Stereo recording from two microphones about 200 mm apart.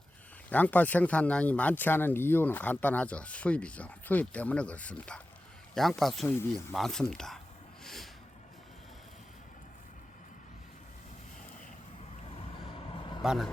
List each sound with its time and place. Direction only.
0.5 s speech: 10° left (ahead or behind)
6.2 s speech: 10° left (ahead or behind)
7.9 s a sound: centre (ahead or behind)
12.9 s vehicle: 25° left (ahead or behind)
13.2 s speech: 5° right (ahead or behind)